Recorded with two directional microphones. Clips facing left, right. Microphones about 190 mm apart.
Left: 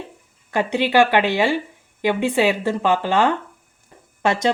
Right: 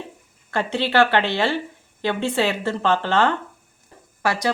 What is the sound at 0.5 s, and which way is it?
Speech, 15° left (ahead or behind).